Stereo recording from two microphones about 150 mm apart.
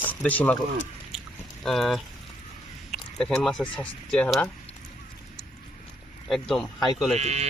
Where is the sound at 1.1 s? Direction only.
5° right (ahead or behind).